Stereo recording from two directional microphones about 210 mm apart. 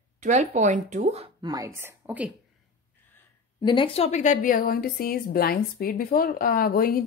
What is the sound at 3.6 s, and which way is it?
A woman's voice, 25° left (ahead or behind).